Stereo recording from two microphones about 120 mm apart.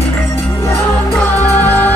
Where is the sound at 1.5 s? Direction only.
15° left (ahead or behind).